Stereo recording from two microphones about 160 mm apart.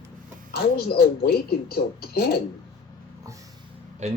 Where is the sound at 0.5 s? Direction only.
75° left (ahead or behind).